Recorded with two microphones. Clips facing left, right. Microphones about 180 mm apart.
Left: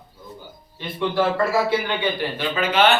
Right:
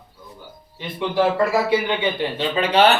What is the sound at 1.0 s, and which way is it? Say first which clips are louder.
A man's voice: right 2 dB; 15° right (ahead or behind).